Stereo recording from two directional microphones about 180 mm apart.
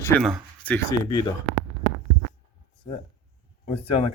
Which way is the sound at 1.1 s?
25° left (ahead or behind).